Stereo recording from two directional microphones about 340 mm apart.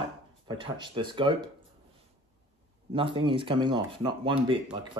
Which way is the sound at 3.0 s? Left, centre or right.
Centre.